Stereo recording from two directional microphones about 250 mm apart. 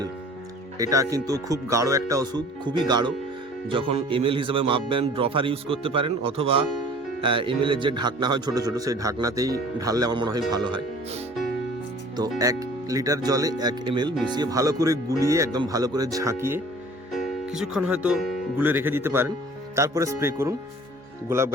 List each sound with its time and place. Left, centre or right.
0.8 s speech: centre
12.4 s speech: centre